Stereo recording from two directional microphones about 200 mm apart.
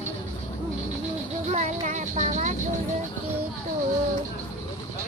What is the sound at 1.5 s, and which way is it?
Speech, 35° right (ahead or behind).